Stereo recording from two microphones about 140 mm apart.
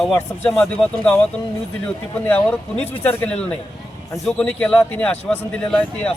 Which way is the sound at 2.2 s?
10° left (ahead or behind).